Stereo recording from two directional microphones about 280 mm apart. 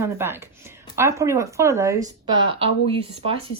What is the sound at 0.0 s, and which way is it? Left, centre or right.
Speech, centre.